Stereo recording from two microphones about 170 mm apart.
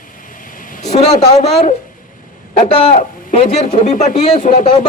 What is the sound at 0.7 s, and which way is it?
Speech, 45° left (ahead or behind).